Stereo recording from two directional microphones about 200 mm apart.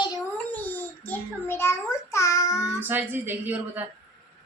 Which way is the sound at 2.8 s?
10° right (ahead or behind).